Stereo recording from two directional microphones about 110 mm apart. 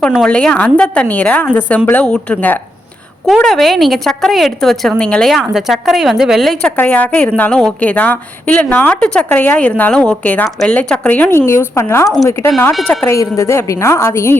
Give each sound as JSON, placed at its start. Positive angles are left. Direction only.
{"t": 0.0, "sound": "a woman's voice", "side_deg": 10}
{"t": 3.2, "sound": "a woman's voice", "side_deg": 0}